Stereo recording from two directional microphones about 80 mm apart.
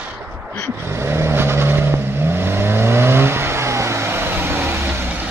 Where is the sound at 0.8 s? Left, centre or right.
Right.